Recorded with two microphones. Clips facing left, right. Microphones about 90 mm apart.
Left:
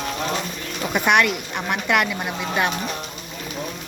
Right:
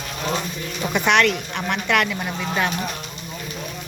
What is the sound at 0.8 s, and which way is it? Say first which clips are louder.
Speech: even; 5° left (ahead or behind).